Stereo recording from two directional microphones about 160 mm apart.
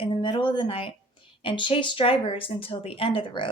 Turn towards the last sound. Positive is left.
turn(degrees=30)  # may be behind; listen again after turning